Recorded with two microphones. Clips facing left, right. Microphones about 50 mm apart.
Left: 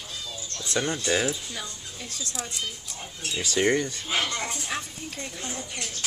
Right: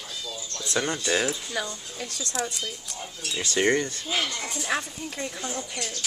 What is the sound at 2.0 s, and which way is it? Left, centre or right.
Speech, right.